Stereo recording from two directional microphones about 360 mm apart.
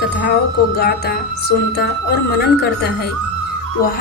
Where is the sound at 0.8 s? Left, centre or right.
Left.